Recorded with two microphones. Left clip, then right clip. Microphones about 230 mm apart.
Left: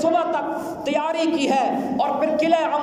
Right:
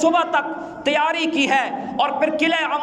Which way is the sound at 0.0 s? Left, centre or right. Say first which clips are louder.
Right 3 dB; right.